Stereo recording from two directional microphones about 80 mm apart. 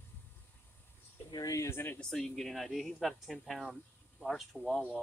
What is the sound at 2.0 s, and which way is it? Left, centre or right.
Speech, centre.